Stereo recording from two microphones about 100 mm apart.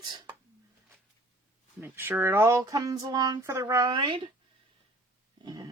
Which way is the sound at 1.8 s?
20° right (ahead or behind).